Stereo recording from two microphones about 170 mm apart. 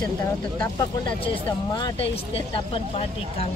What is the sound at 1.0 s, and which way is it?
Speech, 25° left (ahead or behind).